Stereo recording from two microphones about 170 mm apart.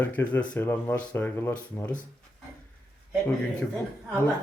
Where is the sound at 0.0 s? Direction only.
10° left (ahead or behind).